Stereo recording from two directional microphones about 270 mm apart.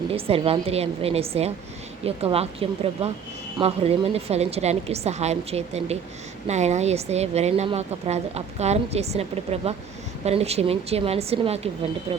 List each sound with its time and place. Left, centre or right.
0.1 s a woman's voice: right